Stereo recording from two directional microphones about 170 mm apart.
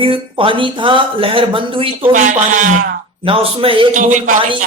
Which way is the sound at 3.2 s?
35° right (ahead or behind).